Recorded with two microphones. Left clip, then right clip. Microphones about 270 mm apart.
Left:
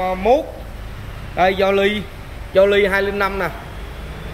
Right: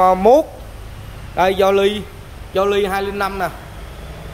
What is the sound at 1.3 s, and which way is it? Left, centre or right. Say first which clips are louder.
A man's voice: right 1 dB; centre.